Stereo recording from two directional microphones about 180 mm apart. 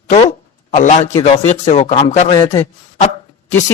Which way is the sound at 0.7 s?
40° left (ahead or behind).